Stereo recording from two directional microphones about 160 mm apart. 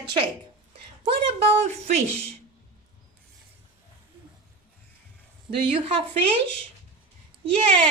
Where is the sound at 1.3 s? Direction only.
40° right (ahead or behind).